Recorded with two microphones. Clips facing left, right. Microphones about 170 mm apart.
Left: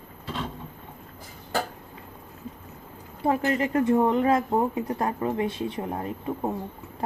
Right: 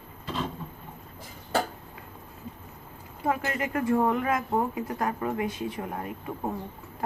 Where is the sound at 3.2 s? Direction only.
30° left (ahead or behind).